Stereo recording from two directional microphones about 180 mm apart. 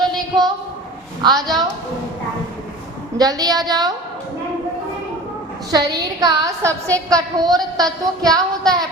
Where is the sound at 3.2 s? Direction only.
20° right (ahead or behind).